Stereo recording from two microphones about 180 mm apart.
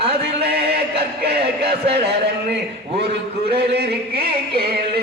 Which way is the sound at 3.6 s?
60° right (ahead or behind).